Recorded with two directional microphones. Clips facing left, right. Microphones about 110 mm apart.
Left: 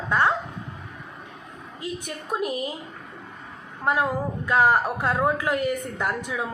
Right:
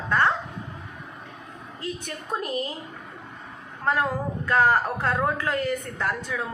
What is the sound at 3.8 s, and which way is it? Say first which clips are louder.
A woman's voice: left 1 dB; 10° left (ahead or behind).